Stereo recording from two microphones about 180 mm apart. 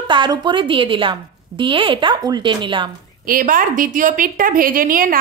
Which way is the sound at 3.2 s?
50° right (ahead or behind).